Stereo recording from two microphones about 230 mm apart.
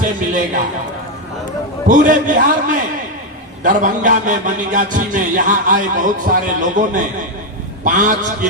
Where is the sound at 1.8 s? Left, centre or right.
Right.